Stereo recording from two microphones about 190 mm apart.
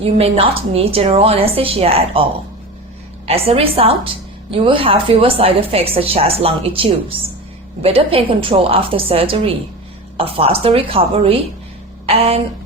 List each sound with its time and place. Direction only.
0.0 s a woman's voice: 30° right (ahead or behind)
3.2 s a woman's voice: 30° right (ahead or behind)